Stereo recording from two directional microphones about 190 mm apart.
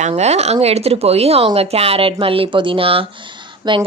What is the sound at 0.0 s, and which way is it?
Speech, 35° right (ahead or behind).